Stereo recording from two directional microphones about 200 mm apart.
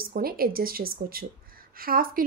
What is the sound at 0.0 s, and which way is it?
A woman's voice, 50° right (ahead or behind).